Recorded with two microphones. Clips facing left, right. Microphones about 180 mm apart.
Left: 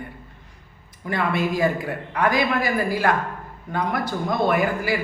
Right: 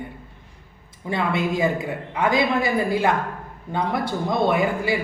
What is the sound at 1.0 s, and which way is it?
A man's voice, 20° right (ahead or behind).